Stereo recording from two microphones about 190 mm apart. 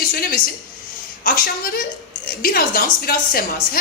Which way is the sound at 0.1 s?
50° left (ahead or behind).